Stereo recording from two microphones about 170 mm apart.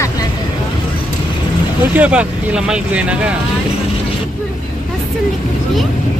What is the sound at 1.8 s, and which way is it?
Speech, 10° right (ahead or behind).